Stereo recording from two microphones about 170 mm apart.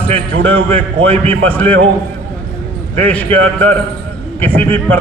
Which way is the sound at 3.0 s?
10° left (ahead or behind).